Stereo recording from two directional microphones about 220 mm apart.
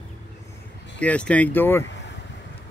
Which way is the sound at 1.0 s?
5° left (ahead or behind).